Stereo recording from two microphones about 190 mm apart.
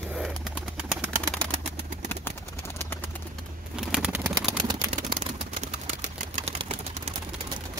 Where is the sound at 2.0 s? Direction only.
10° left (ahead or behind).